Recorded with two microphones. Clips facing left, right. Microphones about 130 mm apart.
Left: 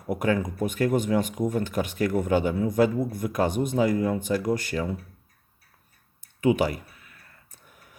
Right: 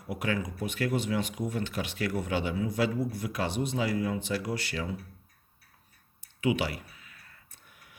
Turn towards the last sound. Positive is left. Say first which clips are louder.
# left 3 dB
turn(degrees=45)  # may be behind; listen again after turning